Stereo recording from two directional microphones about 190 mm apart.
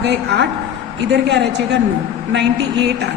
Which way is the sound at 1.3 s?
65° right (ahead or behind).